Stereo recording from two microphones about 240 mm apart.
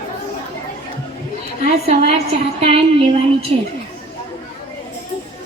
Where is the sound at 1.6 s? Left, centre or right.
Right.